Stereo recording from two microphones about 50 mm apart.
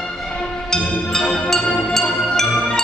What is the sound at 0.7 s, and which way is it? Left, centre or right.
Music, centre.